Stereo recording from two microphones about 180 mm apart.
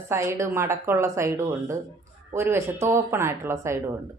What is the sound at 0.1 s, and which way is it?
A woman's voice, 15° right (ahead or behind).